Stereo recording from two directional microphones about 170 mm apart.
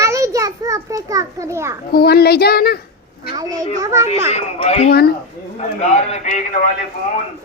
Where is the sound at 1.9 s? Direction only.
70° left (ahead or behind).